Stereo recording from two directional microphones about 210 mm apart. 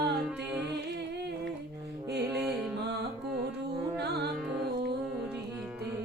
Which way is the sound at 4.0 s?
50° right (ahead or behind).